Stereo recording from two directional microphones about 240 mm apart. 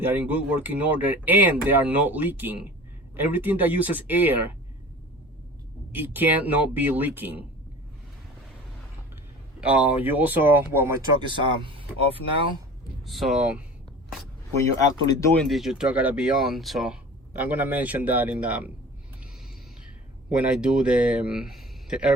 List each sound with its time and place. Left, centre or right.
0.0 s speech: centre
5.9 s speech: centre
9.6 s speech: centre
11.2 s speech: right
13.1 s speech: centre
15.4 s speech: centre
20.3 s speech: centre